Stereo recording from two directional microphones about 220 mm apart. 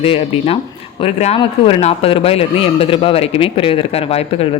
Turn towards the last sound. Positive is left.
turn(degrees=25)  # may be behind; listen again after turning